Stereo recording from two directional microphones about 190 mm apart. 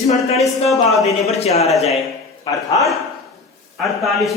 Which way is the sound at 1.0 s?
35° left (ahead or behind).